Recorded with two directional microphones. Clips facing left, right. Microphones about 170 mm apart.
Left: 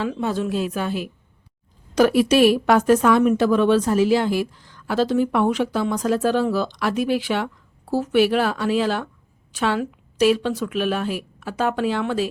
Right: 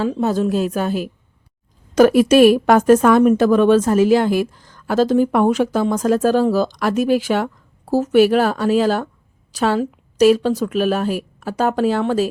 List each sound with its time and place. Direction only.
0.0 s a woman's voice: 40° right (ahead or behind)